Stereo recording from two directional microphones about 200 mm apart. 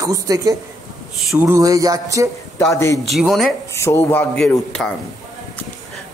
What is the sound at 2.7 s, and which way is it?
Speech, 15° left (ahead or behind).